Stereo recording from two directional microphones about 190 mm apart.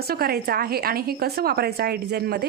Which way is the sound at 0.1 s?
55° right (ahead or behind).